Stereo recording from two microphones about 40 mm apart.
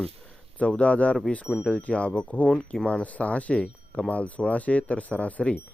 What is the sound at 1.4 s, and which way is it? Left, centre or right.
Speech, centre.